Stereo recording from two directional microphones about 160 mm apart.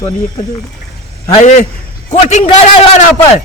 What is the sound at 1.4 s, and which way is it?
A man's voice, 50° left (ahead or behind).